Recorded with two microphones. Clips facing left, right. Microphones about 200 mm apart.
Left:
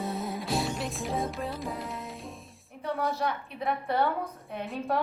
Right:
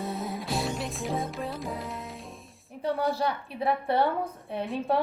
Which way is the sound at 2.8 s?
30° right (ahead or behind).